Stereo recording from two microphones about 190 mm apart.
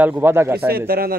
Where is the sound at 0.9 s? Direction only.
50° right (ahead or behind).